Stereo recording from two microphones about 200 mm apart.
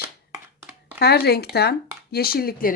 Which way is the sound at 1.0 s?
55° left (ahead or behind).